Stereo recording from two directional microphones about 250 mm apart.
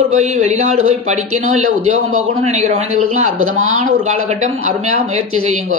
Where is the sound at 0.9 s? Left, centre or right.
Right.